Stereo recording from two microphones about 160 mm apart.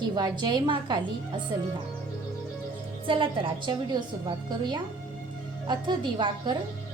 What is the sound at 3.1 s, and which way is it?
A woman's voice, 35° right (ahead or behind).